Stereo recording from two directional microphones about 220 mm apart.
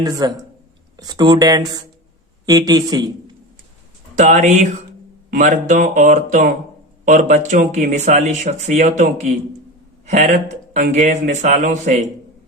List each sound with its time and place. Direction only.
0.0 s speech: 15° right (ahead or behind)
4.2 s speech: 30° right (ahead or behind)
10.1 s speech: 30° right (ahead or behind)